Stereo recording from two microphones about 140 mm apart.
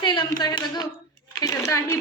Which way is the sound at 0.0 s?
30° left (ahead or behind).